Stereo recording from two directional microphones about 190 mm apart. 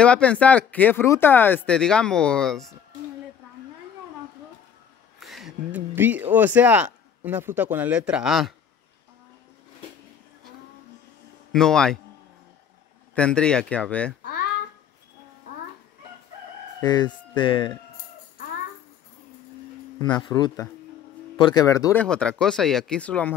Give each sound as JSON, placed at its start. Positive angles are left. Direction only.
{"t": 0.0, "sound": "speech", "side_deg": 5}
{"t": 5.2, "sound": "a sound", "side_deg": 0}
{"t": 6.3, "sound": "a man's voice", "side_deg": -10}
{"t": 11.5, "sound": "speech", "side_deg": 5}
{"t": 13.1, "sound": "speech", "side_deg": 5}
{"t": 16.8, "sound": "speech", "side_deg": 20}
{"t": 20.0, "sound": "speech", "side_deg": 20}
{"t": 22.0, "sound": "speech", "side_deg": 5}